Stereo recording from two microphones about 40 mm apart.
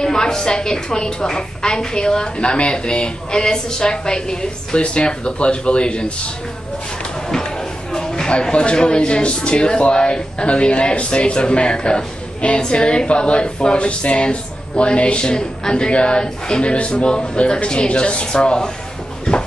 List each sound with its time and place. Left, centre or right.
0.0 s speech: centre
7.9 s a sound: centre
8.3 s speech: left